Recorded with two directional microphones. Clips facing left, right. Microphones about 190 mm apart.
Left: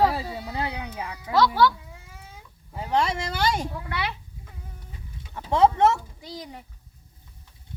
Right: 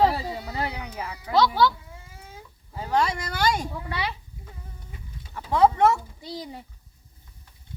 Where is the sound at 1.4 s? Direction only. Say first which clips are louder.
Left 1 dB; 15° right (ahead or behind).